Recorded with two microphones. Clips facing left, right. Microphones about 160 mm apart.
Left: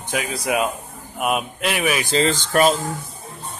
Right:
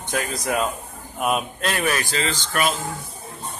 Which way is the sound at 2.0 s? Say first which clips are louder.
Left 6 dB; 30° left (ahead or behind).